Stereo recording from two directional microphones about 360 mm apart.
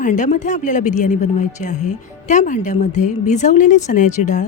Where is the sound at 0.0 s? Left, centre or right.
Left.